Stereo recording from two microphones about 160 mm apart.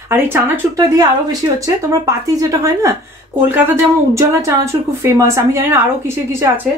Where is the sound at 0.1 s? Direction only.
20° right (ahead or behind).